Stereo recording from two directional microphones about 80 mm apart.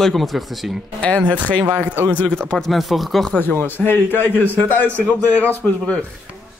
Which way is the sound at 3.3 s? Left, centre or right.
Left.